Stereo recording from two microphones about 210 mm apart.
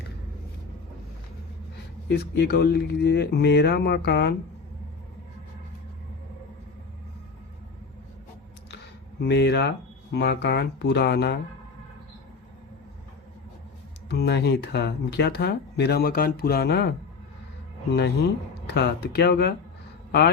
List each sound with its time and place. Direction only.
2.0 s speech: 50° left (ahead or behind)
9.2 s speech: 55° left (ahead or behind)
14.1 s speech: 50° left (ahead or behind)
17.9 s speech: 50° left (ahead or behind)